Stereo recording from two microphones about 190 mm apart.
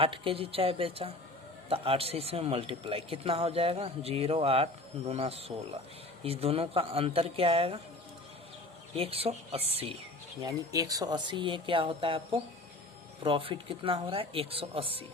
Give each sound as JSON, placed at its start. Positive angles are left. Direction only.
{"t": 0.0, "sound": "a man's voice", "side_deg": -30}
{"t": 9.0, "sound": "a man's voice", "side_deg": -30}
{"t": 10.4, "sound": "speech", "side_deg": -20}
{"t": 13.2, "sound": "speech", "side_deg": -25}